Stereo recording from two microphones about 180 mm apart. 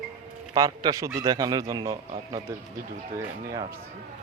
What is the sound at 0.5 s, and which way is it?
A man's voice, 20° right (ahead or behind).